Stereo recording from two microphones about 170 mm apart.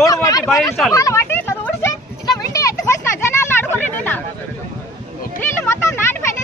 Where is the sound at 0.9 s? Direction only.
20° left (ahead or behind).